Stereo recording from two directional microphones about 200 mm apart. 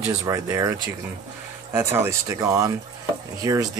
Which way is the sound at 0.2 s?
15° right (ahead or behind).